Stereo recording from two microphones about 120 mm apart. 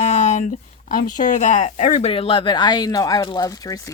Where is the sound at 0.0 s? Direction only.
75° left (ahead or behind).